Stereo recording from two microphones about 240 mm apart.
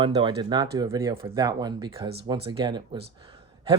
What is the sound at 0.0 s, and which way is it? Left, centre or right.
Speech, centre.